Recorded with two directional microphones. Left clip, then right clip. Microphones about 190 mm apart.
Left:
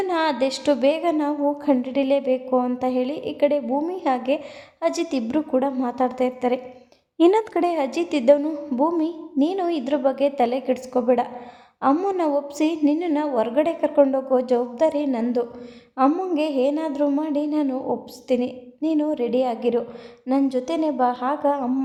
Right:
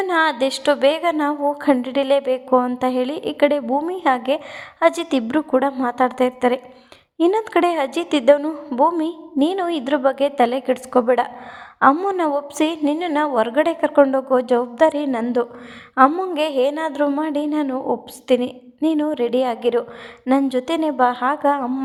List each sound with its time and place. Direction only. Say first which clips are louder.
0.1 s a woman's voice: right 6 dB; 20° right (ahead or behind)
7.2 s speech: right 1 dB; centre (ahead or behind)
7.6 s a woman's voice: right 3 dB; 20° right (ahead or behind)